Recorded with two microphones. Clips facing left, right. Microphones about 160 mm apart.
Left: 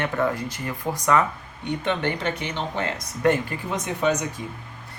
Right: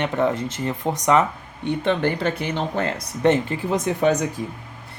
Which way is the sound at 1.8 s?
35° right (ahead or behind).